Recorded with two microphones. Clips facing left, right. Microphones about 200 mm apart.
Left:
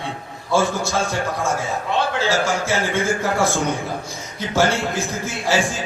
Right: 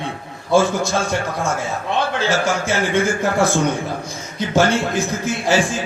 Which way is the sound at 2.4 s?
15° right (ahead or behind).